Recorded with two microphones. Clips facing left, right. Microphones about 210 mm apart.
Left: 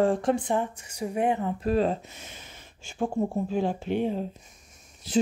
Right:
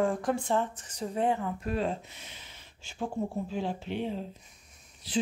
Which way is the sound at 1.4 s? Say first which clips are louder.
Left 6 dB; 35° left (ahead or behind).